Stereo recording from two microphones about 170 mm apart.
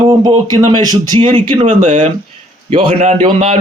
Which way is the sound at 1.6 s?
45° right (ahead or behind).